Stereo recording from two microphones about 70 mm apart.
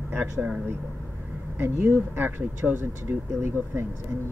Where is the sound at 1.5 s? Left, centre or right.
Right.